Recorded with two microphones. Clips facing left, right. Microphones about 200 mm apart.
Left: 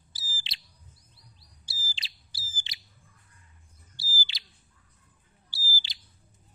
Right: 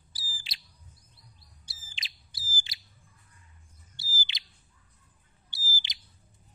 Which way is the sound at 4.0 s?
20° right (ahead or behind).